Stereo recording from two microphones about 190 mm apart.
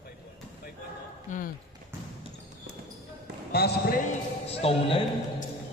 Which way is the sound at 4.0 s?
30° left (ahead or behind).